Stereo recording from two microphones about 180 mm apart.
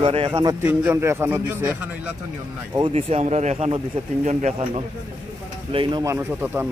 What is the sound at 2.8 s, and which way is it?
Speech, 30° right (ahead or behind).